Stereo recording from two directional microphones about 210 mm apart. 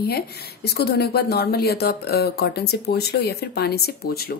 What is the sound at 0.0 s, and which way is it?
Speech, 50° left (ahead or behind).